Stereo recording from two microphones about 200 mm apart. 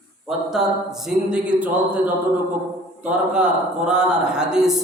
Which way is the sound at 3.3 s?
5° right (ahead or behind).